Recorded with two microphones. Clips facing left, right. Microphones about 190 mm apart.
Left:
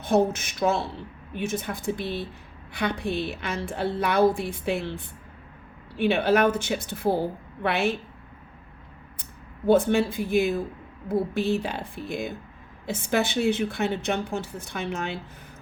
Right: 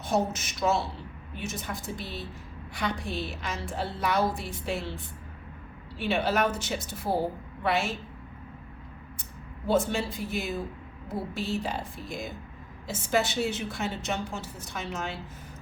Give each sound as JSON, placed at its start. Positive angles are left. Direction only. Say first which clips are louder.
{"t": 0.0, "sound": "a woman's voice", "louder": "left 6 dB", "side_deg": 55}
{"t": 9.6, "sound": "a woman's voice", "louder": "left 6 dB", "side_deg": 60}